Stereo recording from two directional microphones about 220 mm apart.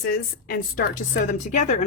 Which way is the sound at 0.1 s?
40° left (ahead or behind).